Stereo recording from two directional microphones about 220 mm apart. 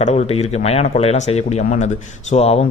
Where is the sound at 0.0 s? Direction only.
30° left (ahead or behind).